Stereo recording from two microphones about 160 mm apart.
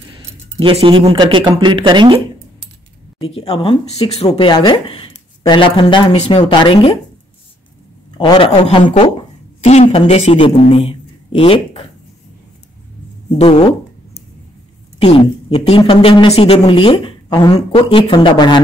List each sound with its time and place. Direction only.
0.6 s speech: 35° right (ahead or behind)
3.2 s speech: 35° left (ahead or behind)
4.5 s speech: 25° left (ahead or behind)
8.2 s speech: 35° left (ahead or behind)
9.6 s speech: 45° left (ahead or behind)
13.4 s speech: 40° left (ahead or behind)
15.0 s a woman's voice: 35° left (ahead or behind)